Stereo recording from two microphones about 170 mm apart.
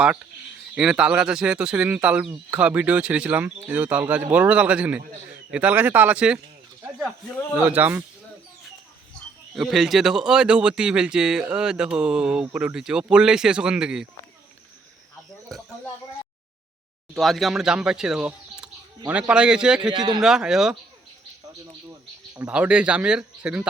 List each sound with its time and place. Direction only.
0.8 s speech: 5° right (ahead or behind)
7.6 s speech: 10° right (ahead or behind)
9.6 s speech: centre (ahead or behind)
15.5 s a sound: centre (ahead or behind)
17.2 s speech: centre (ahead or behind)
19.9 s speech: 25° right (ahead or behind)
20.2 s speech: 5° right (ahead or behind)
22.4 s speech: 5° right (ahead or behind)